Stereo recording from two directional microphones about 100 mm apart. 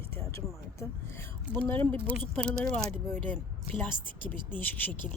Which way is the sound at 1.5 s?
20° left (ahead or behind).